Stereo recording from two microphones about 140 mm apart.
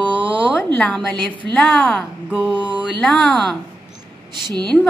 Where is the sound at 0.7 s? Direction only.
5° left (ahead or behind).